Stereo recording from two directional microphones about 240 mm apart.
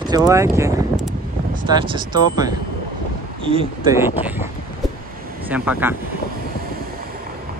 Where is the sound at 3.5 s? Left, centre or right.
Centre.